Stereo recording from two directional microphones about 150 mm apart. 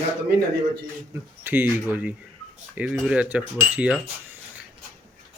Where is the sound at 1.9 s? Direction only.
10° right (ahead or behind).